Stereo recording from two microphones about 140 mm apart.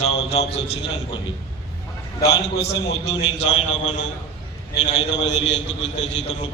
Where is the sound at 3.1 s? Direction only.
50° left (ahead or behind).